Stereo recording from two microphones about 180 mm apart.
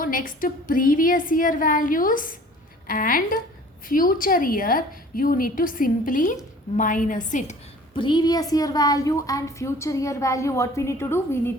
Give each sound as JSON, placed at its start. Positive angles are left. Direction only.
{"t": 0.0, "sound": "a woman's voice", "side_deg": 50}
{"t": 7.9, "sound": "a woman's voice", "side_deg": 25}